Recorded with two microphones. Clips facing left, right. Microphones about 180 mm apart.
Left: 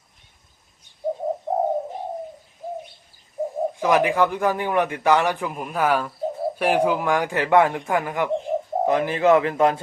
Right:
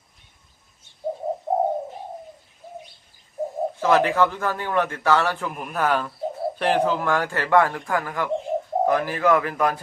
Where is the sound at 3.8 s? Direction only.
15° left (ahead or behind).